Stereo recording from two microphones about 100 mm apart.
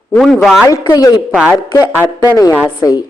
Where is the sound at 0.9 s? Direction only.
40° left (ahead or behind).